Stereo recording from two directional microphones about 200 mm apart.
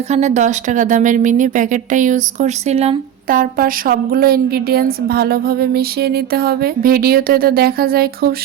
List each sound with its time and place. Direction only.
0.1 s speech: 35° right (ahead or behind)
3.2 s speech: 45° right (ahead or behind)